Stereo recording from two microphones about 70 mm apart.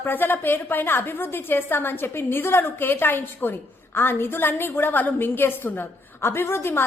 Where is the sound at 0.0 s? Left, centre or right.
Left.